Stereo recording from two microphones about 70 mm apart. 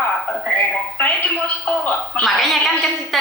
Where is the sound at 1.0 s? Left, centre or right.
Left.